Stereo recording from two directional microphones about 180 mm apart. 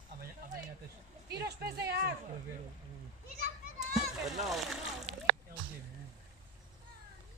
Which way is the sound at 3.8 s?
Centre (ahead or behind).